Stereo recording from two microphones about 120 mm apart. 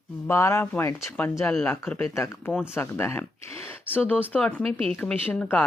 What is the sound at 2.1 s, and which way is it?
Speech, 25° left (ahead or behind).